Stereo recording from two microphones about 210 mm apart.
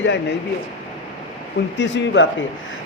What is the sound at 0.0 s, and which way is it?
Speech, 60° left (ahead or behind).